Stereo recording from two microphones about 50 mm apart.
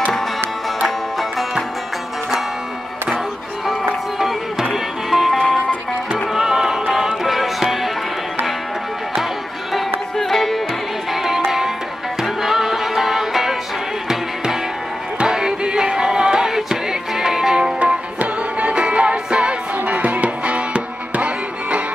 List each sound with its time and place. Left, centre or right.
5.1 s music: centre
10.1 s music: centre
11.2 s music: centre
17.7 s music: right